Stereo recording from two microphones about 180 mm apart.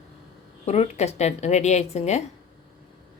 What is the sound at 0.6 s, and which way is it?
Speech, 35° left (ahead or behind).